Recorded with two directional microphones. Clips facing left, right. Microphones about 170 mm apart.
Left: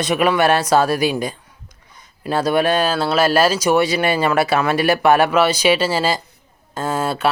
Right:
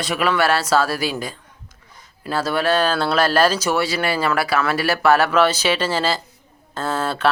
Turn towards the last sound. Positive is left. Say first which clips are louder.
# left 2 dB
turn(degrees=10)  # may be behind; listen again after turning